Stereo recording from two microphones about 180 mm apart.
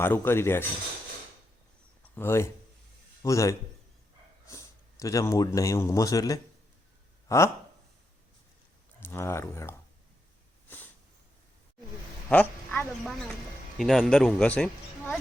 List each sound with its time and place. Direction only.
0.0 s speech: 15° left (ahead or behind)
2.1 s speech: 15° left (ahead or behind)
9.0 s speech: 15° left (ahead or behind)
12.3 s a woman's voice: 10° left (ahead or behind)